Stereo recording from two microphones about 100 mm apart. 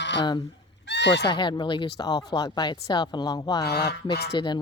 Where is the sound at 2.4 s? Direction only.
45° left (ahead or behind).